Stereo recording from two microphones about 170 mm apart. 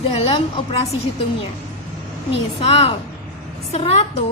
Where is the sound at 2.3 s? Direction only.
35° left (ahead or behind).